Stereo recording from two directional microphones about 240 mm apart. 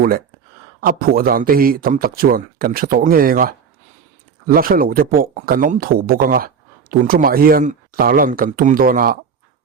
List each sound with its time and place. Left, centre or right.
0.8 s speech: right